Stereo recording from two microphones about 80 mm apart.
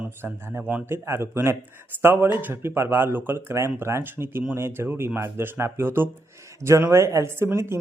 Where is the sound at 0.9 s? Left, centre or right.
Right.